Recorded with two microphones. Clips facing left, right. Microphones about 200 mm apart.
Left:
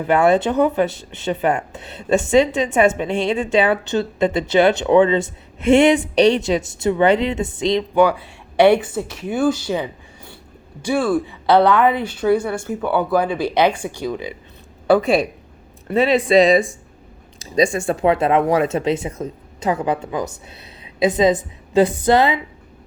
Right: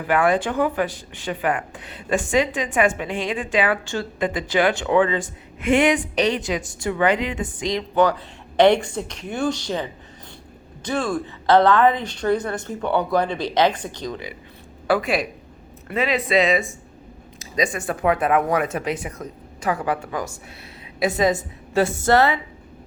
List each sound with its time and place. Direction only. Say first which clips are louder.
0.0 s speech: left 4 dB; 25° left (ahead or behind)
7.9 s a woman's voice: right 1 dB; 10° left (ahead or behind)
14.8 s a woman's voice: left 6 dB; 25° left (ahead or behind)